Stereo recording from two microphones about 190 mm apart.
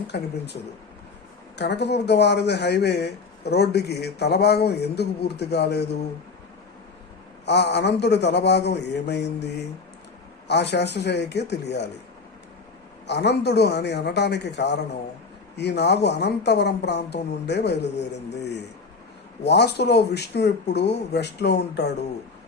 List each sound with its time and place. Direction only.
0.1 s speech: 60° left (ahead or behind)
7.4 s speech: 65° left (ahead or behind)
10.5 s speech: 65° left (ahead or behind)
13.1 s speech: 65° left (ahead or behind)
19.4 s speech: 60° left (ahead or behind)